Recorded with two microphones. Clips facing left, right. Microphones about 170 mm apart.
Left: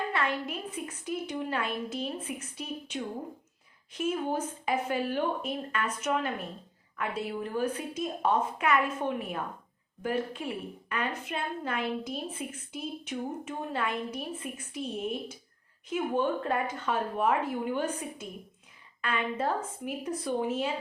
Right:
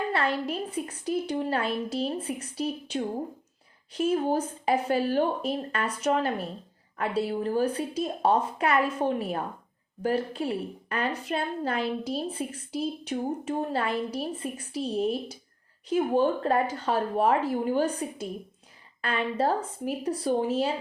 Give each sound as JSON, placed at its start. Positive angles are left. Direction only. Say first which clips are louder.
{"t": 0.1, "sound": "a woman's voice", "louder": "right 4 dB", "side_deg": -30}